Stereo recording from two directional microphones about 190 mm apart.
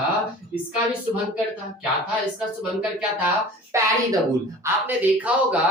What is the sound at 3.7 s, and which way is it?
Speech, 15° right (ahead or behind).